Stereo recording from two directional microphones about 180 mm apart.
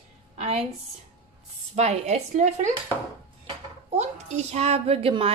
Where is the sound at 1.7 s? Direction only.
40° right (ahead or behind).